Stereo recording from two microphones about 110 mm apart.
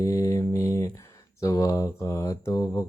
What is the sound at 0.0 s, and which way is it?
Mantra, 30° left (ahead or behind).